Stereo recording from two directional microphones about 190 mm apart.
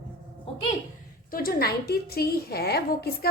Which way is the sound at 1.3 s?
50° left (ahead or behind).